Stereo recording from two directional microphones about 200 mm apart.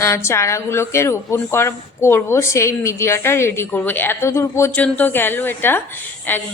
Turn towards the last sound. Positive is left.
turn(degrees=10)  # may be behind; listen again after turning